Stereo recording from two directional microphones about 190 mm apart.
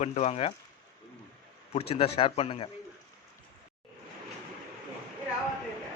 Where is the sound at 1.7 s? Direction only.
30° left (ahead or behind).